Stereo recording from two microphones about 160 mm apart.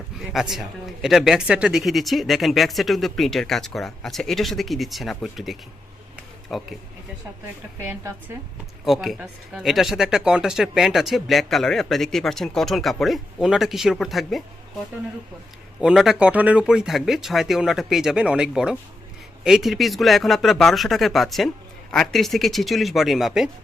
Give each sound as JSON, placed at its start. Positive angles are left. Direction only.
{"t": 0.3, "sound": "speech", "side_deg": 0}
{"t": 6.1, "sound": "a sound", "side_deg": 0}
{"t": 7.9, "sound": "a woman's voice", "side_deg": -15}
{"t": 8.8, "sound": "speech", "side_deg": 0}
{"t": 15.8, "sound": "speech", "side_deg": -5}